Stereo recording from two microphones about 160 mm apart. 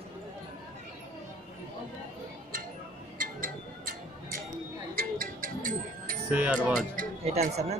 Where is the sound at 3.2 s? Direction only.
60° right (ahead or behind).